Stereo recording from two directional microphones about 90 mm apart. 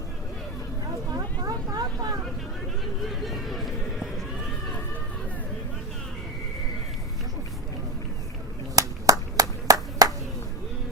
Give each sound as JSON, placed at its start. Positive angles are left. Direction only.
{"t": 1.1, "sound": "a sound", "side_deg": -45}
{"t": 3.1, "sound": "run", "side_deg": 0}
{"t": 8.7, "sound": "clapping", "side_deg": -40}